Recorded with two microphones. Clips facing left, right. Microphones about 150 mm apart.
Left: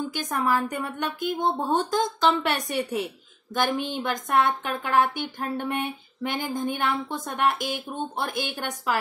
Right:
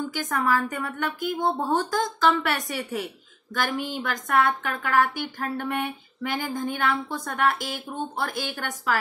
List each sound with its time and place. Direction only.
0.2 s a woman's voice: 20° left (ahead or behind)